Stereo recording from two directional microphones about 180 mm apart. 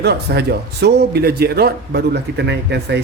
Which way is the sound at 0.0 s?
65° right (ahead or behind).